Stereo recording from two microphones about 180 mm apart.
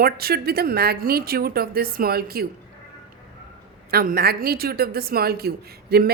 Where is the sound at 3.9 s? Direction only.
55° right (ahead or behind).